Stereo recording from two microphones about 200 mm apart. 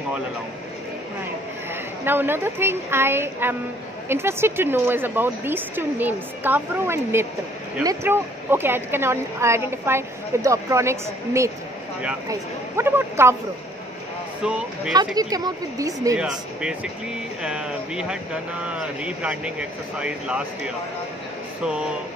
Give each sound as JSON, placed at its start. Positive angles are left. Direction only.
{"t": 2.0, "sound": "speech", "side_deg": -10}
{"t": 15.1, "sound": "speech", "side_deg": -20}
{"t": 16.2, "sound": "speech", "side_deg": -5}